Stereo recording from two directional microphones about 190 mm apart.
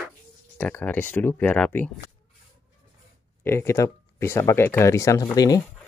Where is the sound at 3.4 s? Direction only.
15° left (ahead or behind).